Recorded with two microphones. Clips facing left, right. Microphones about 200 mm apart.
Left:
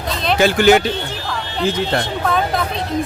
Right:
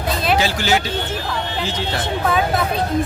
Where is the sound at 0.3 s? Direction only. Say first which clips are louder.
Left 11 dB; 55° left (ahead or behind).